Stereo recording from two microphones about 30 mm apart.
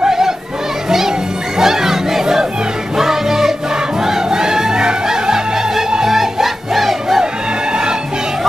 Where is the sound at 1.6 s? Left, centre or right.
Centre.